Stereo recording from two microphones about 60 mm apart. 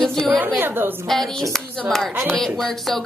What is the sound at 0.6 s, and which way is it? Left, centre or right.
Speech, right.